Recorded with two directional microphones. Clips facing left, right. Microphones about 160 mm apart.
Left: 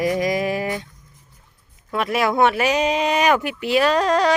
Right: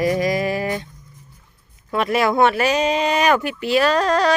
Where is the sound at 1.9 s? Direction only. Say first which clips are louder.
Right 2 dB; 5° left (ahead or behind).